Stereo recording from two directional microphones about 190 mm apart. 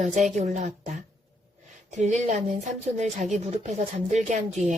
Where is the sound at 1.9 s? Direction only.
40° right (ahead or behind).